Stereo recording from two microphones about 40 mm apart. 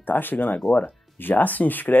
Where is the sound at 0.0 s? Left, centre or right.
Left.